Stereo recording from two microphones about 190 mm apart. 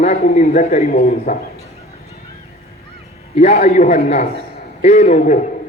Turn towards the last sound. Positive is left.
turn(degrees=40)  # may be behind; listen again after turning